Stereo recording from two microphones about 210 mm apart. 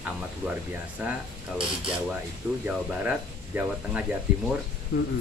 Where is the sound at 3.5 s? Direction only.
10° right (ahead or behind).